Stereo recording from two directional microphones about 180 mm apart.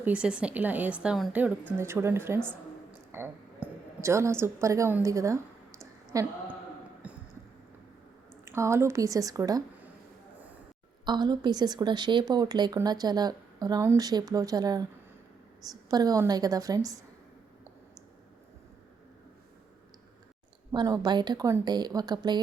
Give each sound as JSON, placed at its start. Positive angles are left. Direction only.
{"t": 0.0, "sound": "speech", "side_deg": -5}
{"t": 3.1, "sound": "a sound", "side_deg": -15}
{"t": 8.4, "sound": "speech", "side_deg": -15}
{"t": 11.0, "sound": "a woman's voice", "side_deg": -25}
{"t": 20.7, "sound": "a woman's voice", "side_deg": -20}